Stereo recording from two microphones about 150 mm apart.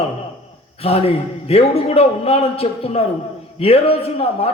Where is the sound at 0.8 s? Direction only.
40° left (ahead or behind).